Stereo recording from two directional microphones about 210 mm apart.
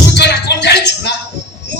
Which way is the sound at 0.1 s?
55° left (ahead or behind).